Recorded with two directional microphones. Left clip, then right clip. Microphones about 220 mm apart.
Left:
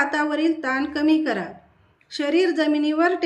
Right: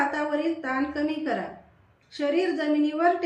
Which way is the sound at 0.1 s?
55° left (ahead or behind).